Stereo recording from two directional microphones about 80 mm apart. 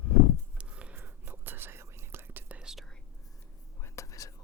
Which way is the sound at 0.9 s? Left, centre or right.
Right.